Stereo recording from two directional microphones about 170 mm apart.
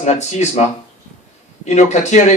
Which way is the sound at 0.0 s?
45° left (ahead or behind).